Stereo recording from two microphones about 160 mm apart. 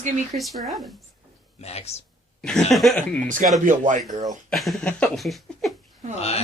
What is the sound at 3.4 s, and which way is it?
Speech, 50° right (ahead or behind).